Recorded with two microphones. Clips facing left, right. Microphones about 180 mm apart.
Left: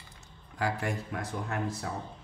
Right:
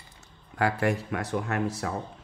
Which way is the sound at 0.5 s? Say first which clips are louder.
Right 6 dB; 65° right (ahead or behind).